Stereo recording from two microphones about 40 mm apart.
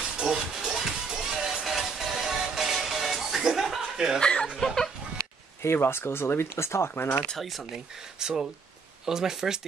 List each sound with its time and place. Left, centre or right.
0.2 s music: centre
3.9 s chuckle: centre
4.2 s chuckle: left
4.6 s a sound: centre
5.7 s speech: left
8.2 s speech: centre